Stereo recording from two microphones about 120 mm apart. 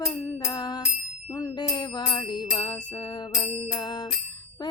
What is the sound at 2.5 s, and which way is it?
Music, 50° left (ahead or behind).